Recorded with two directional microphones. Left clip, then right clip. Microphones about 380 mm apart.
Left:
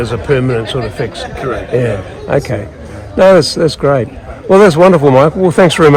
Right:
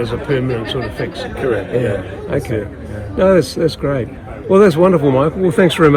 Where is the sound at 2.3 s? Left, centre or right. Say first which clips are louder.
Left 6 dB; centre.